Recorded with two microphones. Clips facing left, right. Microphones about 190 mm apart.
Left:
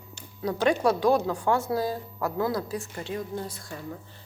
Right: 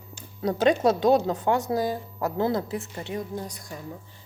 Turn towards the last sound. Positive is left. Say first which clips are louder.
# even
turn(degrees=-15)  # may be behind; listen again after turning